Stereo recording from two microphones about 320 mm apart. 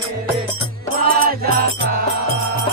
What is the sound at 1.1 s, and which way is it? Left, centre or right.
Music, right.